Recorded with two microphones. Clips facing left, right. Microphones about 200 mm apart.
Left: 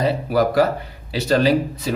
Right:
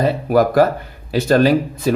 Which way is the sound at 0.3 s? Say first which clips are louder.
Right 4 dB; 50° right (ahead or behind).